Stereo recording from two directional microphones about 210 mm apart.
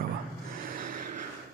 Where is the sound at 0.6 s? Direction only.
40° right (ahead or behind).